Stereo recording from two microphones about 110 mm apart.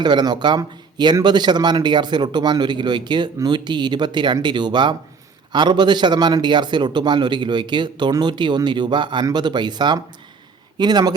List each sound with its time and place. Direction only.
0.0 s a man's voice: 40° right (ahead or behind)